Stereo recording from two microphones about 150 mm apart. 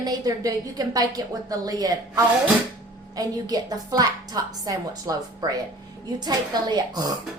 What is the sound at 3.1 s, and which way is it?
A woman's voice, 25° right (ahead or behind).